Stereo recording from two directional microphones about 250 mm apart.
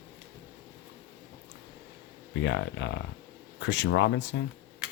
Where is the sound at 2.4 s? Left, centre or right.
Left.